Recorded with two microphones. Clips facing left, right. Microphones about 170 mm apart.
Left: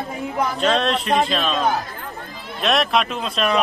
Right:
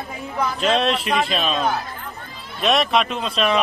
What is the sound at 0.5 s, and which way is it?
A man's voice, centre (ahead or behind).